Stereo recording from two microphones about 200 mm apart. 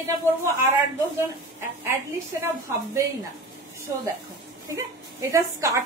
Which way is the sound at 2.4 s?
15° right (ahead or behind).